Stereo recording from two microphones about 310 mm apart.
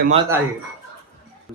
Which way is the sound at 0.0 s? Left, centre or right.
Centre.